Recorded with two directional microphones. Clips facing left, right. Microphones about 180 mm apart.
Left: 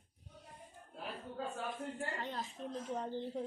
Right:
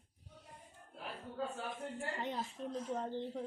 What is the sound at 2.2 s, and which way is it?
Speech, 15° right (ahead or behind).